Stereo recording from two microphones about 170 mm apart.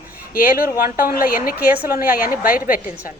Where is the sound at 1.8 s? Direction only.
10° right (ahead or behind).